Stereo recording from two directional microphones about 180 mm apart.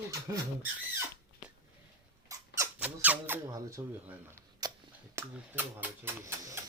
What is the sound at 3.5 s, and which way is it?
Speech, 20° right (ahead or behind).